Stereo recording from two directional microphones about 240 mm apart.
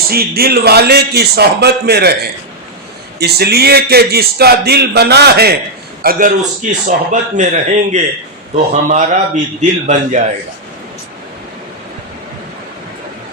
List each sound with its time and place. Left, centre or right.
0.1 s a man's voice: right
3.2 s a man's voice: right